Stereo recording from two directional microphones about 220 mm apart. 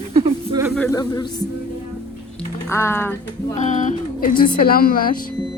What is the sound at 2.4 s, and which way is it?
Speech, 10° left (ahead or behind).